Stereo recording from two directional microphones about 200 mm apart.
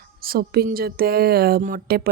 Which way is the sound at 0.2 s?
50° right (ahead or behind).